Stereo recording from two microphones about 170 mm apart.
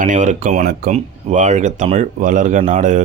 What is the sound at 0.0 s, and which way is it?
Speech, 45° right (ahead or behind).